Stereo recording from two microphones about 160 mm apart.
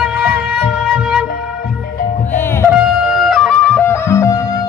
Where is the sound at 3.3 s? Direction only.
5° left (ahead or behind); by 4.4 s 20° left (ahead or behind).